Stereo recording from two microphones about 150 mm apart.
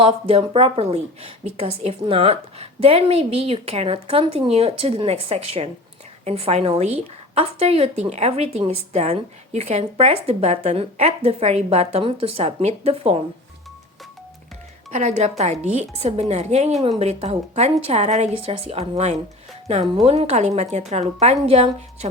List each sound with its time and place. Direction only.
0.0 s a woman's voice: 40° right (ahead or behind)
14.9 s a woman's voice: 45° right (ahead or behind)